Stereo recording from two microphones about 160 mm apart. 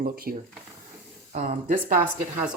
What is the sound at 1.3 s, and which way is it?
Speech, 50° right (ahead or behind).